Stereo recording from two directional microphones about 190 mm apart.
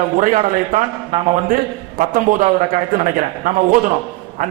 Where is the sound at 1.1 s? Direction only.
30° right (ahead or behind).